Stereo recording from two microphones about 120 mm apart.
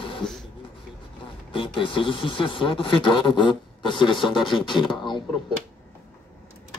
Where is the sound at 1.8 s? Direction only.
45° left (ahead or behind).